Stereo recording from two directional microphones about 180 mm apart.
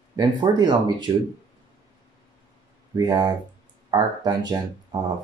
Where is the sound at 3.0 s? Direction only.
20° right (ahead or behind).